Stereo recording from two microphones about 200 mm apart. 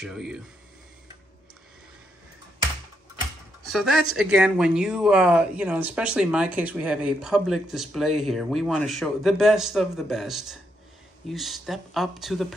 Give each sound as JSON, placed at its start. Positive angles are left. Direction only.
{"t": 0.0, "sound": "speech", "side_deg": 0}
{"t": 3.7, "sound": "speech", "side_deg": 0}